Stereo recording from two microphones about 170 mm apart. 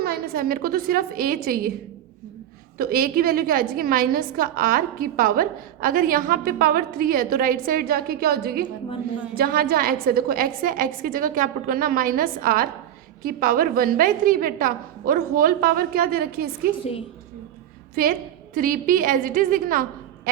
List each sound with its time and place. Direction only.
0.0 s a woman's voice: 65° right (ahead or behind)
2.7 s a woman's voice: 60° right (ahead or behind)
17.9 s a woman's voice: 60° right (ahead or behind)